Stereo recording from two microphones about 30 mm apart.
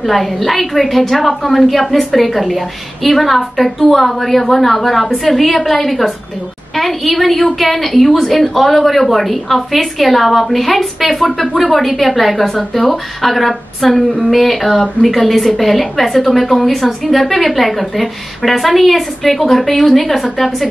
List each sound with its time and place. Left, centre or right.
0.0 s a woman's voice: centre